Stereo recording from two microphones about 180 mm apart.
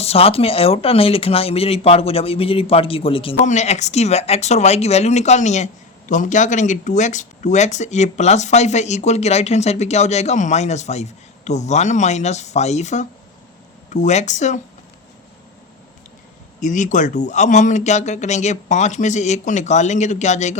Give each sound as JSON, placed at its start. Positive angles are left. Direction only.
{"t": 0.0, "sound": "speech", "side_deg": 35}
{"t": 16.6, "sound": "speech", "side_deg": 45}